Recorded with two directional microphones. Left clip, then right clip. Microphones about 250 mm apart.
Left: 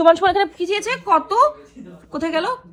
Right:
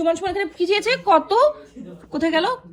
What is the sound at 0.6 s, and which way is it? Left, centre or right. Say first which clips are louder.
A woman's voice: right 2 dB; right.